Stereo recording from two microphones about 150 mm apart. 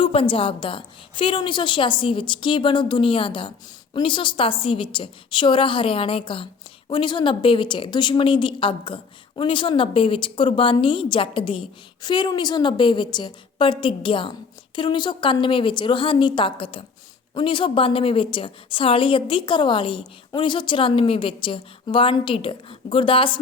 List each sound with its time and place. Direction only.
0.0 s a woman's voice: 35° left (ahead or behind)